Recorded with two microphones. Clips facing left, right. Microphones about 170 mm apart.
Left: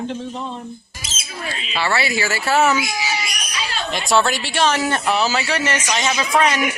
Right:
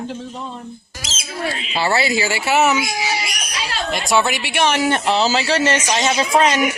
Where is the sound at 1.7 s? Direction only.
25° right (ahead or behind).